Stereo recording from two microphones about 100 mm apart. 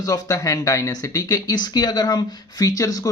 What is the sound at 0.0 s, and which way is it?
Speech, 40° left (ahead or behind).